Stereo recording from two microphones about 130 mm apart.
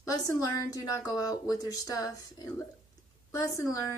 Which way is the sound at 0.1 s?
25° left (ahead or behind).